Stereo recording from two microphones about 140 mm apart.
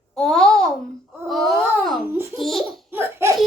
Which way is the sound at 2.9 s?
20° right (ahead or behind).